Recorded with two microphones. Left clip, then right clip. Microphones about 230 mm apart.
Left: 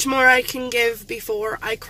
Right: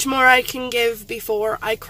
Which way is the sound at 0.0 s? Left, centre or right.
Centre.